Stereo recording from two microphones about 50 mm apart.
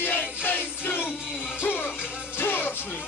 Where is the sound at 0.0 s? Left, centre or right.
Left.